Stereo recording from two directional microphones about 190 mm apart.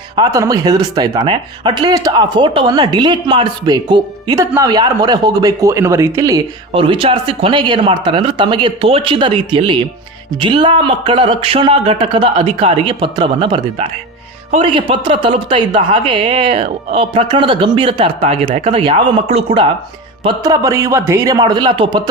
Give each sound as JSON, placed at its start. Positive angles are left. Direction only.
{"t": 0.2, "sound": "speech", "side_deg": -15}